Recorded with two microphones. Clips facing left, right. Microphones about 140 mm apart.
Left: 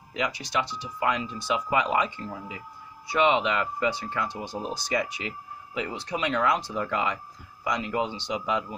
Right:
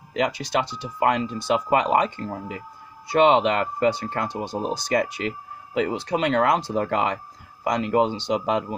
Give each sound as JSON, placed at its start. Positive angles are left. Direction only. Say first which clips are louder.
{"t": 0.1, "sound": "speech", "louder": "right 6 dB", "side_deg": -60}
{"t": 5.8, "sound": "speech", "louder": "right 7 dB", "side_deg": -65}